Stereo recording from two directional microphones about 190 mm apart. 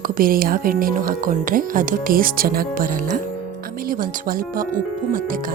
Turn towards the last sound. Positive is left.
turn(degrees=-50)  # may be behind; listen again after turning